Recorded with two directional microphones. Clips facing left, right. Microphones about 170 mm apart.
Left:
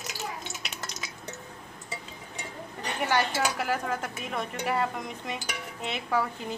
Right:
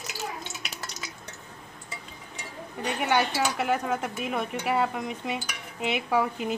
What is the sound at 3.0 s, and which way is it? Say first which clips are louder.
Speech: right 1 dB; centre (ahead or behind).